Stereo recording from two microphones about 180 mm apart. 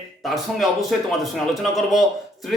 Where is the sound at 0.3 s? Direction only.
Centre (ahead or behind).